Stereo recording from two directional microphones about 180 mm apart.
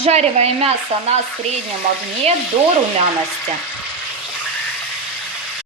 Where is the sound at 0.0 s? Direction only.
35° right (ahead or behind).